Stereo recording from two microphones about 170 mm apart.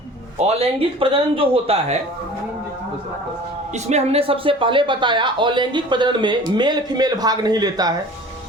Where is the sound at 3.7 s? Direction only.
40° right (ahead or behind); by 7.9 s 25° right (ahead or behind).